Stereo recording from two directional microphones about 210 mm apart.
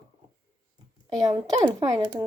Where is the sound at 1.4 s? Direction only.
20° right (ahead or behind).